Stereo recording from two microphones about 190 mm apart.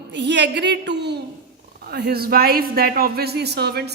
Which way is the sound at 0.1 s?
65° right (ahead or behind).